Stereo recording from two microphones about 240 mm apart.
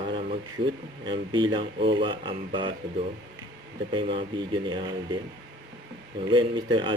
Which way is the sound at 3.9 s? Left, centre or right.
Right.